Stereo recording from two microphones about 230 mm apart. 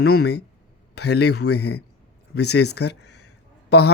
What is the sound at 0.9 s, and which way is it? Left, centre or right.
Speech, left.